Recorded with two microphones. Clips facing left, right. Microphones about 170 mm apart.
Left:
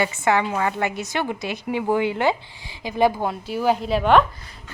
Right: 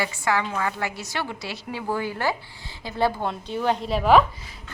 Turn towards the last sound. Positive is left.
turn(degrees=0)  # may be behind; listen again after turning